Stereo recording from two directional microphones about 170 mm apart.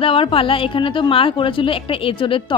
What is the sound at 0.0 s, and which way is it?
Speech, 30° left (ahead or behind).